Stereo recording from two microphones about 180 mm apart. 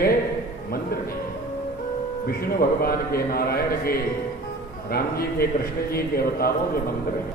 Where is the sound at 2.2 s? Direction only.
55° left (ahead or behind).